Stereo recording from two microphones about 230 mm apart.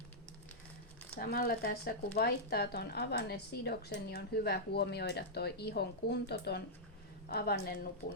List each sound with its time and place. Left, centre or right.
1.2 s speech: left